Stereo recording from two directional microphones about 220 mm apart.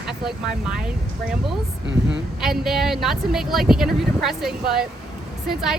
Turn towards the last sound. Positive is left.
turn(degrees=0)  # may be behind; listen again after turning